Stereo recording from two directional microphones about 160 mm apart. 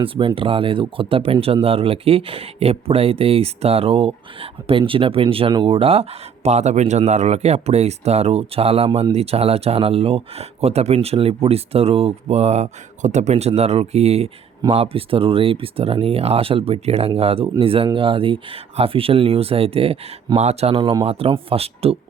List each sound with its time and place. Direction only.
0.0 s speech: 35° right (ahead or behind)